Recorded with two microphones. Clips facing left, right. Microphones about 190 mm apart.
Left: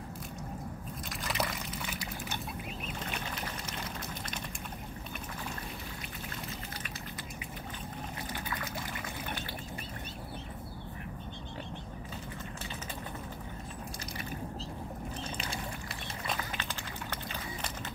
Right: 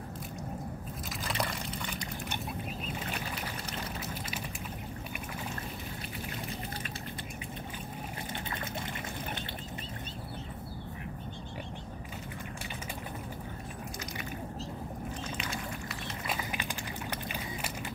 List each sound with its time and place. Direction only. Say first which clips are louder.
1.2 s water: even; 5° left (ahead or behind)
15.3 s pour: right 1 dB; 30° left (ahead or behind)
16.3 s a sound: right 1 dB; 10° right (ahead or behind)